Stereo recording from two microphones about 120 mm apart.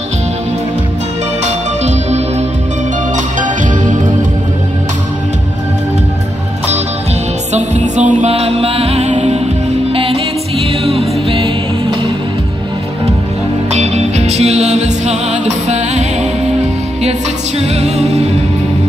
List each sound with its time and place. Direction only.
1.9 s music: 65° right (ahead or behind)
3.3 s music: 90° right
7.5 s music: 75° right (ahead or behind)
9.9 s music: 50° right (ahead or behind)
13.7 s music: 65° right (ahead or behind)
17.6 s music: 65° right (ahead or behind)